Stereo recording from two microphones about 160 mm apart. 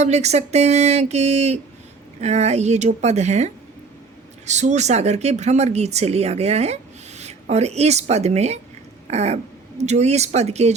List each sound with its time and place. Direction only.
0.0 s speech: 45° right (ahead or behind)